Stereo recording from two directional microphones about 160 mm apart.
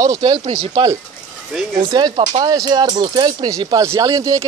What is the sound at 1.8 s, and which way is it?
Speech, 25° right (ahead or behind).